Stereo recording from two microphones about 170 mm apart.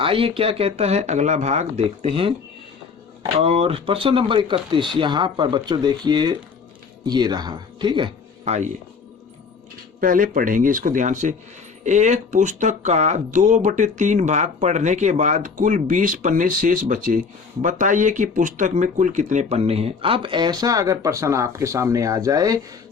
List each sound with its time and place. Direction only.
0.0 s speech: 30° right (ahead or behind)
3.4 s speech: 35° right (ahead or behind)
8.4 s speech: 45° right (ahead or behind)
10.0 s speech: 55° right (ahead or behind); by 22.6 s 20° right (ahead or behind)